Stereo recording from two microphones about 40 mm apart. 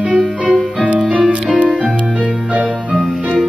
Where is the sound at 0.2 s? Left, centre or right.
Centre.